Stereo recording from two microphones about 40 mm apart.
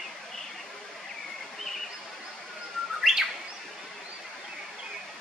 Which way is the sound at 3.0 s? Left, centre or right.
Centre.